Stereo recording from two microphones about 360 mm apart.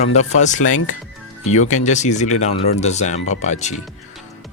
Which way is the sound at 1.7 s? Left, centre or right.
Centre.